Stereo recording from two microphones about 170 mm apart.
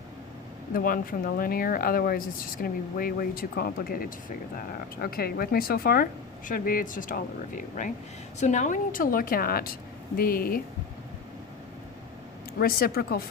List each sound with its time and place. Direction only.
0.7 s speech: 55° left (ahead or behind)
12.5 s speech: 65° left (ahead or behind)